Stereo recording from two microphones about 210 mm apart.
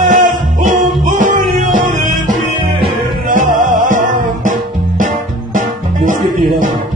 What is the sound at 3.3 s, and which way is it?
Music, 40° right (ahead or behind).